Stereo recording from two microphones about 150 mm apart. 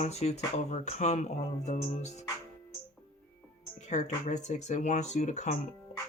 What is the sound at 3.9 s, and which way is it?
Speech, 50° left (ahead or behind).